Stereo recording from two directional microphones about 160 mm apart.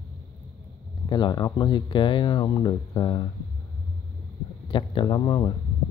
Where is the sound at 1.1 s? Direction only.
25° left (ahead or behind).